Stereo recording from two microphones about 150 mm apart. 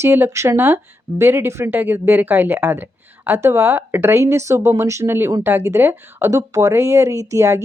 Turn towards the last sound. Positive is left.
turn(degrees=-20)  # may be behind; listen again after turning